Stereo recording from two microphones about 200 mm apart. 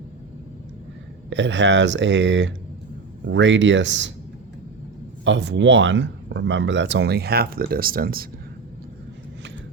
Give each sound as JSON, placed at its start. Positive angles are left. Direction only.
{"t": 1.3, "sound": "speech", "side_deg": -65}
{"t": 5.2, "sound": "speech", "side_deg": -65}